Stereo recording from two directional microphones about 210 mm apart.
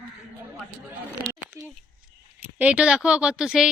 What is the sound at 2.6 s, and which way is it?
Speech, 5° right (ahead or behind).